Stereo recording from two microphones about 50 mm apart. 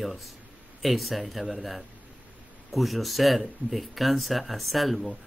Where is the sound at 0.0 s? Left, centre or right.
Centre.